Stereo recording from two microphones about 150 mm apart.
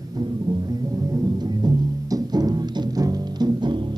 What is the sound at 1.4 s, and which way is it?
Music, 25° right (ahead or behind).